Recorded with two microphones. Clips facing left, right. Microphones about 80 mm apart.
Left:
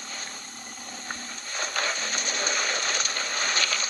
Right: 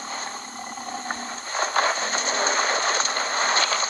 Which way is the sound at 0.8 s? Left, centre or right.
Right.